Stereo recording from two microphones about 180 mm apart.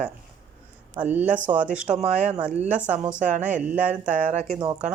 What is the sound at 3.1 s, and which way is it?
Speech, 45° right (ahead or behind).